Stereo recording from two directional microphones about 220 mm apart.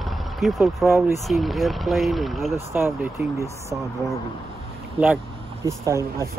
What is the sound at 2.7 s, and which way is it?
Speech, 10° right (ahead or behind).